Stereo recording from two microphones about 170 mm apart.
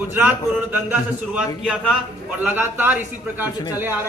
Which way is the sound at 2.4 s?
10° right (ahead or behind).